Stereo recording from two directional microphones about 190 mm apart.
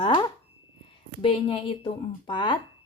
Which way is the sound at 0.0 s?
25° left (ahead or behind).